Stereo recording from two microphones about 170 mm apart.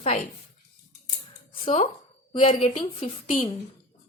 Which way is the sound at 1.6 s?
40° left (ahead or behind).